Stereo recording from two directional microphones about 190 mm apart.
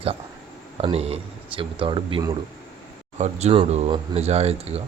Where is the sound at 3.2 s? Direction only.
35° right (ahead or behind).